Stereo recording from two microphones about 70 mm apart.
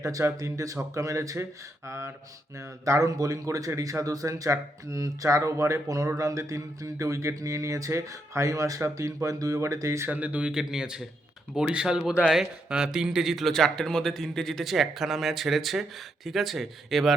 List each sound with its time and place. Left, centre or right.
0.0 s speech: right
10.1 s speech: right
10.5 s a man's voice: centre